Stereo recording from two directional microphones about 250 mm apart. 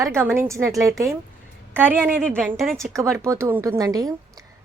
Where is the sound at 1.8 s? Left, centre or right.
Centre.